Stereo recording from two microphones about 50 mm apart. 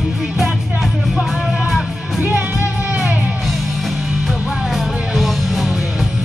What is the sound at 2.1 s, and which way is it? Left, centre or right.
Music, right.